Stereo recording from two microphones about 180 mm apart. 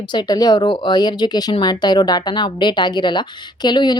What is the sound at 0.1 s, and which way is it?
Speech, 20° left (ahead or behind).